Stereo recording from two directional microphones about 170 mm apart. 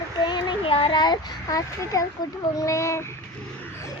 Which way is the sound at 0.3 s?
30° left (ahead or behind).